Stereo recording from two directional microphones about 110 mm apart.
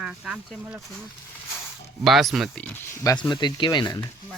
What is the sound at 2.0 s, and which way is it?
Speech, centre (ahead or behind).